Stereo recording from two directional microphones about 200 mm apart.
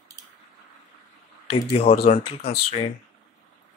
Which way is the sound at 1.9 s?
50° left (ahead or behind).